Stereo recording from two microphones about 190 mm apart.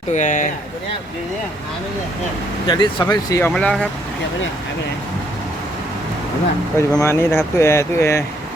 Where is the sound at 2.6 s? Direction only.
25° left (ahead or behind).